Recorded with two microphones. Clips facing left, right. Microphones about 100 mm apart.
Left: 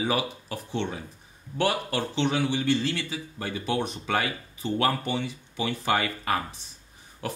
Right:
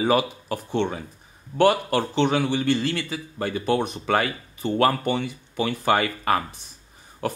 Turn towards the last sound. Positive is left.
turn(degrees=-50)  # may be behind; listen again after turning